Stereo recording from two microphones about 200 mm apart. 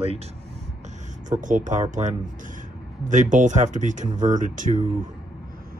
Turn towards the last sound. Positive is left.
turn(degrees=-40)  # may be behind; listen again after turning